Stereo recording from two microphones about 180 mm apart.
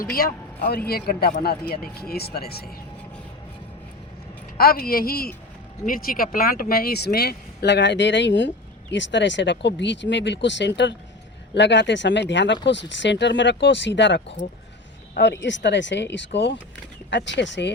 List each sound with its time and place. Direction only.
0.0 s a man's voice: 55° left (ahead or behind)
4.5 s a man's voice: 55° left (ahead or behind); by 17.7 s 80° left